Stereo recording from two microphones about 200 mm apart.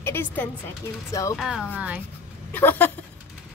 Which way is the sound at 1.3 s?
Centre (ahead or behind).